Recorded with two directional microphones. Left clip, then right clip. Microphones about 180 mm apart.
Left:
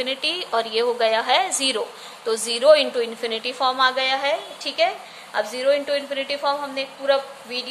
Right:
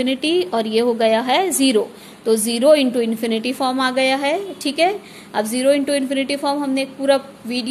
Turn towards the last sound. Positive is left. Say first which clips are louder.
# right 2 dB
turn(degrees=-50)  # may be behind; listen again after turning